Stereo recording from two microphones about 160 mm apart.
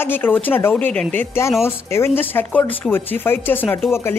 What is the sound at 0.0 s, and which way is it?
Speech, 10° left (ahead or behind).